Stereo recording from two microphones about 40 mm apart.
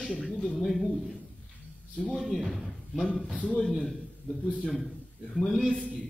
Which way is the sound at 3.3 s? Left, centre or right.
Centre.